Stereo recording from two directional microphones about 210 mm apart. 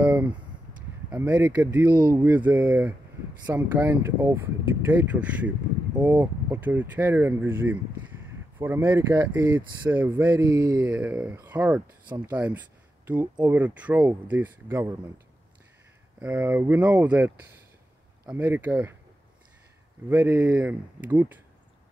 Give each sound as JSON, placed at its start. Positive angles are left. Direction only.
{"t": 0.0, "sound": "a sound", "side_deg": -5}
{"t": 1.1, "sound": "speech", "side_deg": -5}
{"t": 1.9, "sound": "speech", "side_deg": -20}
{"t": 2.1, "sound": "speech", "side_deg": -10}
{"t": 16.2, "sound": "speech", "side_deg": -10}
{"t": 18.3, "sound": "speech", "side_deg": -10}
{"t": 20.1, "sound": "speech", "side_deg": -10}